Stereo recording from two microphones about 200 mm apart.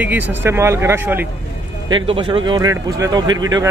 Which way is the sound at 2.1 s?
25° right (ahead or behind).